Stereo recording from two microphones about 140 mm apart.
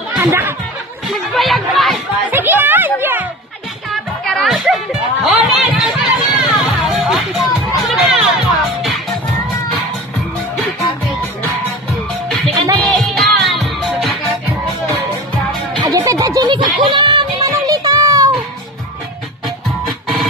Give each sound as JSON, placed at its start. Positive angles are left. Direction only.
{"t": 0.2, "sound": "speech", "side_deg": -15}
{"t": 1.0, "sound": "chatter", "side_deg": 0}
{"t": 2.3, "sound": "music", "side_deg": -15}
{"t": 3.9, "sound": "music", "side_deg": 0}
{"t": 12.8, "sound": "music", "side_deg": 0}
{"t": 15.8, "sound": "a sound", "side_deg": -25}